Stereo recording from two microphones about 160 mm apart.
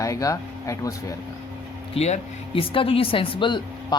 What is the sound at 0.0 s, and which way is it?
Speech, 20° left (ahead or behind).